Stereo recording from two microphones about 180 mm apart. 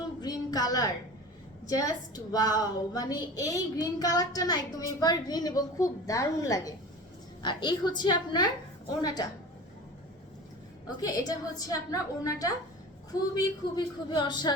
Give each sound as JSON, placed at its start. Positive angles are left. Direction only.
{"t": 0.2, "sound": "a sound", "side_deg": 20}
{"t": 1.6, "sound": "a woman's voice", "side_deg": 20}
{"t": 10.8, "sound": "a woman's voice", "side_deg": 20}